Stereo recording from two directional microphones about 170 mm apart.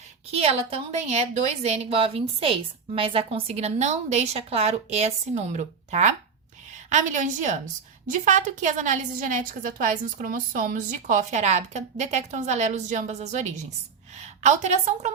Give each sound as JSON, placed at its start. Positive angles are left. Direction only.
{"t": 0.3, "sound": "a woman's voice", "side_deg": -35}